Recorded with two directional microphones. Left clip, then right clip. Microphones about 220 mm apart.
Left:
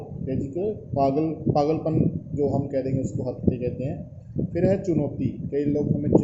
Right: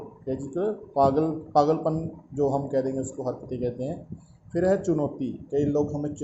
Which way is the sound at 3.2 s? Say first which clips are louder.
Right 2 dB; 30° right (ahead or behind).